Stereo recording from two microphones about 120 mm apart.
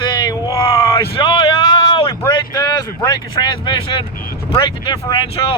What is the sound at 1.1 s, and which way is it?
Speech, 45° left (ahead or behind).